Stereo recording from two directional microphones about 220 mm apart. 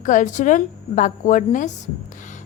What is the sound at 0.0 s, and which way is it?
A woman's voice, 35° left (ahead or behind).